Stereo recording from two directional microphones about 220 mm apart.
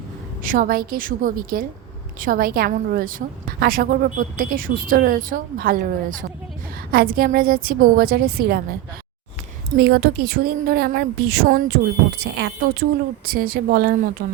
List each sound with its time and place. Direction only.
0.4 s a woman's voice: 40° right (ahead or behind)
9.7 s a woman's voice: 45° right (ahead or behind)